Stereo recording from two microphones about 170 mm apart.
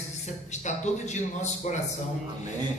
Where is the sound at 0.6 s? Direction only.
45° left (ahead or behind).